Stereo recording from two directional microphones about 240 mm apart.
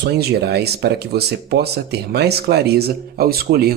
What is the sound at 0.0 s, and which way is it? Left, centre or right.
Speech, right.